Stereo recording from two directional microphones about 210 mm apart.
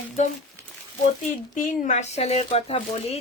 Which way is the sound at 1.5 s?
35° left (ahead or behind).